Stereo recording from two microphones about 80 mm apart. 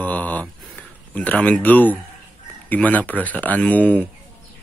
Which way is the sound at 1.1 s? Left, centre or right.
Centre.